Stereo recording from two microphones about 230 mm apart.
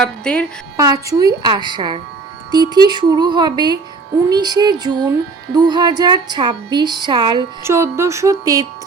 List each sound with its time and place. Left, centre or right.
0.0 s a woman's voice: centre
0.8 s a woman's voice: centre